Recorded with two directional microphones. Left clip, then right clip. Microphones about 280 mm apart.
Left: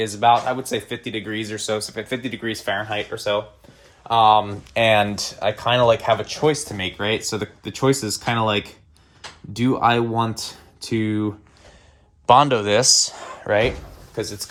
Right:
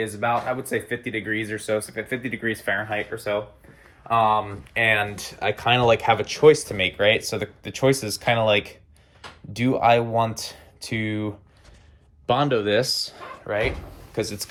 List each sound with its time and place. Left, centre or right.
0.2 s speech: centre
5.4 s speech: centre
12.3 s speech: left
13.5 s speech: left